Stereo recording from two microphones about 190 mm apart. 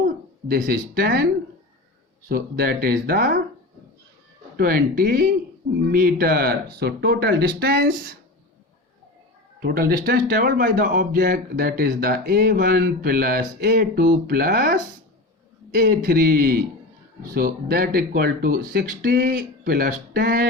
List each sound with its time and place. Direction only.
0.4 s a man's voice: 50° right (ahead or behind)
2.3 s a man's voice: 55° right (ahead or behind)
4.5 s speech: 55° right (ahead or behind)
9.6 s a man's voice: 50° right (ahead or behind)